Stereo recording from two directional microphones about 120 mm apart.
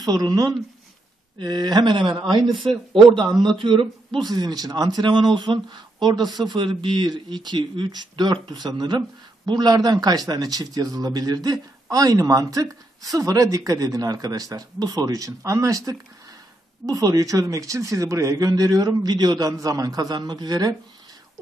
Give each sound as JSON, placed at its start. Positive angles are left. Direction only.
{"t": 0.0, "sound": "speech", "side_deg": -35}
{"t": 2.5, "sound": "a man's voice", "side_deg": 0}
{"t": 3.1, "sound": "speech", "side_deg": -45}